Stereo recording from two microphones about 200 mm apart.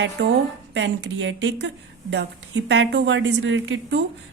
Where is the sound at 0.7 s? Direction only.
65° right (ahead or behind).